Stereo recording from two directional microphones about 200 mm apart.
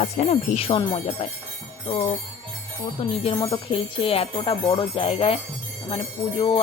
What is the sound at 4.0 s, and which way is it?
Jingle bell, 25° left (ahead or behind).